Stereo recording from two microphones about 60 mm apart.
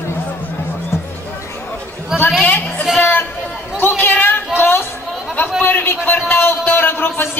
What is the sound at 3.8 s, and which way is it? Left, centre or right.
Chatter, left.